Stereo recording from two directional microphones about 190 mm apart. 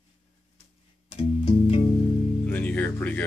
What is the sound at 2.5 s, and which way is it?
Music, 10° left (ahead or behind).